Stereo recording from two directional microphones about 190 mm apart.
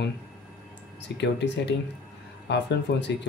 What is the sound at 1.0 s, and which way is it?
Speech, 65° left (ahead or behind).